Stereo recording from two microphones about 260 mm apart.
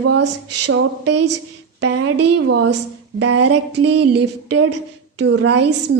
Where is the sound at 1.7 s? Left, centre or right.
Right.